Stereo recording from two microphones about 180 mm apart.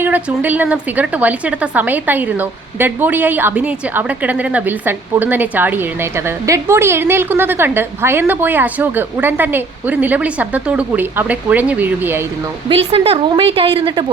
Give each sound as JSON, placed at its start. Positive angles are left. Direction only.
{"t": 0.0, "sound": "a woman's voice", "side_deg": -10}
{"t": 12.6, "sound": "a woman's voice", "side_deg": -30}